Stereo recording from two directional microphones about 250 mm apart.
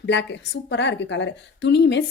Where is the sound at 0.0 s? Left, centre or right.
Left.